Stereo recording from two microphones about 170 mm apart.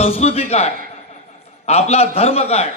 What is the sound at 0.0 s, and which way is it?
A man's voice, 35° left (ahead or behind).